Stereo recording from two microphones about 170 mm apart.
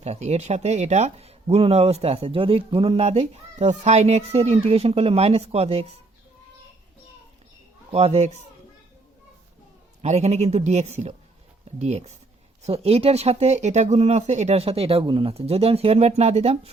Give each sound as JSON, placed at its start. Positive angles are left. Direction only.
{"t": 0.0, "sound": "speech", "side_deg": -40}
{"t": 7.9, "sound": "speech", "side_deg": -35}
{"t": 10.0, "sound": "speech", "side_deg": -40}